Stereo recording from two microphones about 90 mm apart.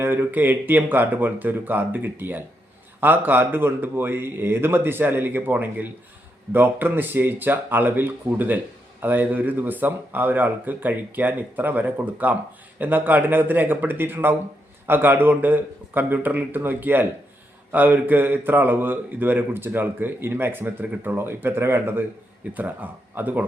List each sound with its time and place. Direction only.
0.0 s speech: 25° right (ahead or behind)